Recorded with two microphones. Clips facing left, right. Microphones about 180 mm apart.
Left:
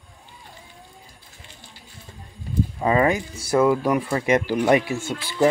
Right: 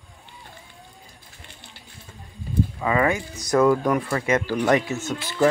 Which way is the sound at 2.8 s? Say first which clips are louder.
Left 3 dB; 35° left (ahead or behind).